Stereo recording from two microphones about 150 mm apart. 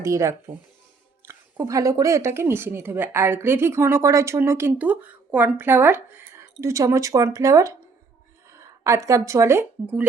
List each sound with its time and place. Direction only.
0.0 s speech: 20° right (ahead or behind)